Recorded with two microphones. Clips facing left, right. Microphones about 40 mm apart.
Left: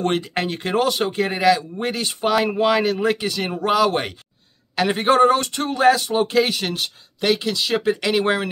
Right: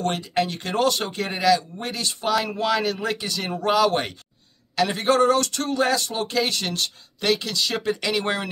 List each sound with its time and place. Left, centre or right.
0.0 s speech: left
3.5 s speech: centre
4.7 s speech: left